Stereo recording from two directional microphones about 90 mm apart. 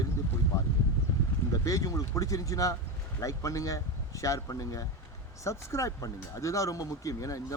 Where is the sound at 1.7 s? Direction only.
40° left (ahead or behind).